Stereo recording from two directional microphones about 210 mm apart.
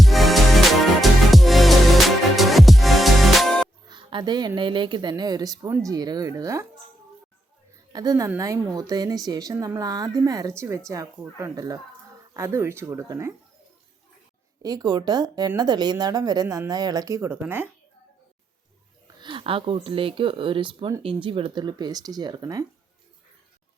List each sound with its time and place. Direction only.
0.0 s music: centre (ahead or behind)
3.8 s speech: 20° right (ahead or behind)
7.9 s a woman's voice: 15° right (ahead or behind)
14.6 s a woman's voice: 15° right (ahead or behind)
19.2 s speech: 25° right (ahead or behind)